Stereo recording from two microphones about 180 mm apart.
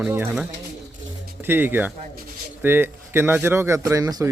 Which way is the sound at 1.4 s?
10° right (ahead or behind).